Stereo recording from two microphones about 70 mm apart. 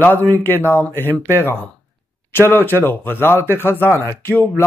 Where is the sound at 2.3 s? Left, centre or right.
Left.